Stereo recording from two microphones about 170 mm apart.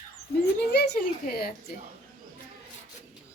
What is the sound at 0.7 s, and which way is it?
Speech, 65° left (ahead or behind).